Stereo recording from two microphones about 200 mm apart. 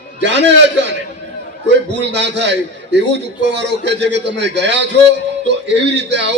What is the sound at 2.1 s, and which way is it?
A man's voice, 60° right (ahead or behind).